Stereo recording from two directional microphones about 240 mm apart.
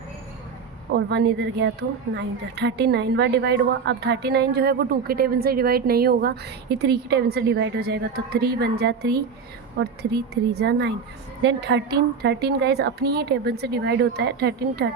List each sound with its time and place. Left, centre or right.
0.9 s a woman's voice: right